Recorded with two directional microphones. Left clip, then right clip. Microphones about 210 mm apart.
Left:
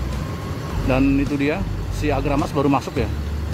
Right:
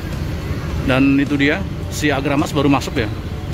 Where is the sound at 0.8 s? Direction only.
Centre (ahead or behind).